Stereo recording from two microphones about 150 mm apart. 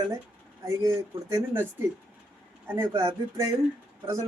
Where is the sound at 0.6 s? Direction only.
20° right (ahead or behind).